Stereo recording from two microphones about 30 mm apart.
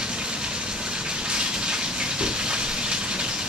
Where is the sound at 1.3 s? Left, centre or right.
Right.